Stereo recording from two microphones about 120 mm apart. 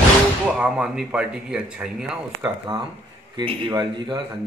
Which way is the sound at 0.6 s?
5° right (ahead or behind).